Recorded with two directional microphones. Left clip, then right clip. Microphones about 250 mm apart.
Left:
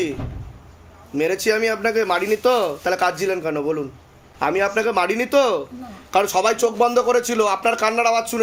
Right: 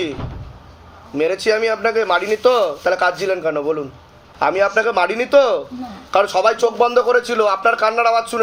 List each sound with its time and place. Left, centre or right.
1.1 s a man's voice: left